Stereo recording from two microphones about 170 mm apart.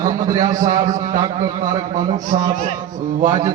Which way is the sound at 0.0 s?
20° right (ahead or behind).